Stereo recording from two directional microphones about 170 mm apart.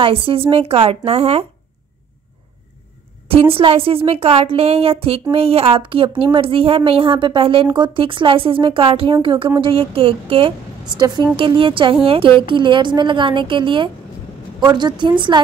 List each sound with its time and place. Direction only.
0.0 s a woman's voice: 35° right (ahead or behind)
3.3 s a woman's voice: 35° right (ahead or behind)